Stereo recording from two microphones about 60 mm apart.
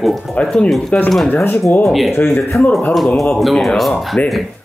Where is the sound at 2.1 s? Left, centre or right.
Left.